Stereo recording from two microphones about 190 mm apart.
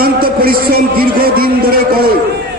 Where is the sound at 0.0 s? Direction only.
50° right (ahead or behind).